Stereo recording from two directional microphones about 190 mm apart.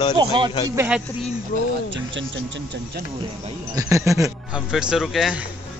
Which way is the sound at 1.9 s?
75° right (ahead or behind).